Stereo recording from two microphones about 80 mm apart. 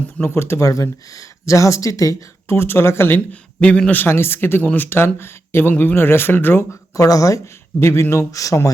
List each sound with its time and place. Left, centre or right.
0.2 s speech: left
2.6 s speech: left
3.6 s a man's voice: centre
4.0 s speech: left
6.9 s speech: left